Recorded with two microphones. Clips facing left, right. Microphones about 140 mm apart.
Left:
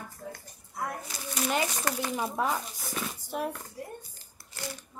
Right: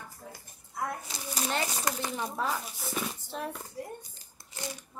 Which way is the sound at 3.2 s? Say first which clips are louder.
Left 4 dB; 15° left (ahead or behind).